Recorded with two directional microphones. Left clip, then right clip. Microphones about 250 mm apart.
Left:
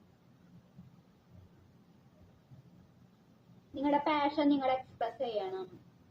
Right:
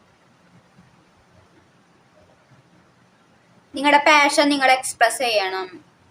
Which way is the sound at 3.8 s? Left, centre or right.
Right.